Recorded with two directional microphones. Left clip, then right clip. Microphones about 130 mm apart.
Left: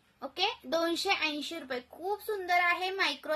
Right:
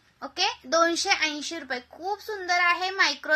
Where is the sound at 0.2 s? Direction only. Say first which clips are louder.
Right 5 dB; 20° left (ahead or behind).